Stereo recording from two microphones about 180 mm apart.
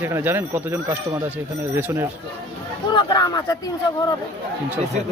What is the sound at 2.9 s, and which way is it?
Speech, 25° left (ahead or behind).